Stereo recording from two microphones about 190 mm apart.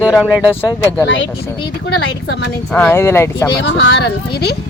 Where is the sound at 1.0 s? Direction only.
75° left (ahead or behind).